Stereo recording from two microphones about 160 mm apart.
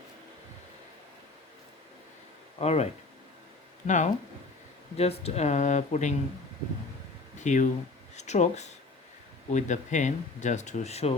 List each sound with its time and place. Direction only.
2.6 s speech: 40° left (ahead or behind)
7.3 s speech: 50° left (ahead or behind)